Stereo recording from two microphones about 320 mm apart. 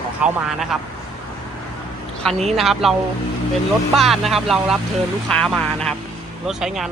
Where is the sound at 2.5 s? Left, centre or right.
Centre.